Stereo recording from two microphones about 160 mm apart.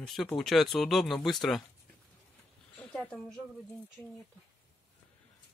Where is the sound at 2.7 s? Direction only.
10° left (ahead or behind).